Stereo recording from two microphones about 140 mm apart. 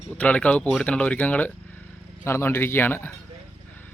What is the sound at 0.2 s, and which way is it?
Speech, 10° left (ahead or behind).